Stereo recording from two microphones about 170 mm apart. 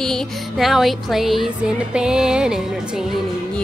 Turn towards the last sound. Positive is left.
turn(degrees=0)  # may be behind; listen again after turning